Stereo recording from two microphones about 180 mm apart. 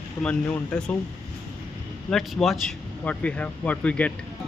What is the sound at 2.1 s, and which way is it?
Speech, centre (ahead or behind).